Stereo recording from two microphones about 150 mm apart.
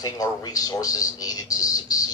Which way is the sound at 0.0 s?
25° left (ahead or behind).